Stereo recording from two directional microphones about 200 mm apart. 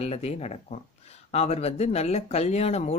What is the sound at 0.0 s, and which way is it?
Speech, 30° left (ahead or behind).